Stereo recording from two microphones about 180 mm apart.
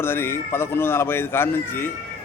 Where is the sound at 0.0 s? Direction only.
15° left (ahead or behind).